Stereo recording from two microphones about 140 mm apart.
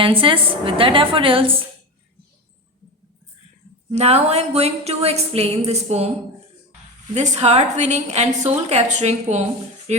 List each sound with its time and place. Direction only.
0.0 s a woman's voice: 40° right (ahead or behind)
3.9 s a woman's voice: 50° right (ahead or behind)
7.1 s a woman's voice: 50° right (ahead or behind)